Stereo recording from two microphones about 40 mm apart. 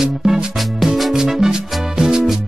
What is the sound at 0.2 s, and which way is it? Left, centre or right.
Music, centre.